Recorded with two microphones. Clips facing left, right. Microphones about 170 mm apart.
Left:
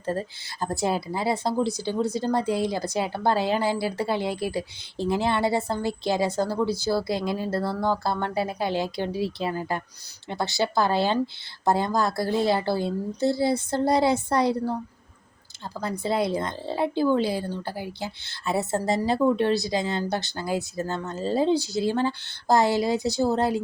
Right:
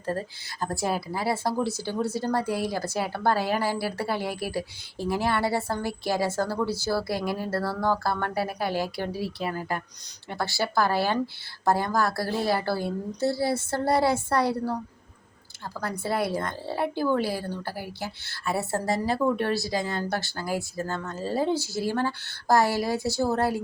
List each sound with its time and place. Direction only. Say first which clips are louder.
0.6 s a woman's voice: left 2 dB; 25° left (ahead or behind)
16.0 s a woman's voice: left 2 dB; 20° left (ahead or behind)